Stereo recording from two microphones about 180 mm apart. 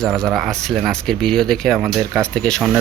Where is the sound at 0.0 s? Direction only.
Centre (ahead or behind).